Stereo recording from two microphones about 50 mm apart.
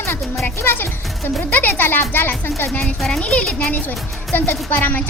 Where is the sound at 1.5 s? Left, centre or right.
Left.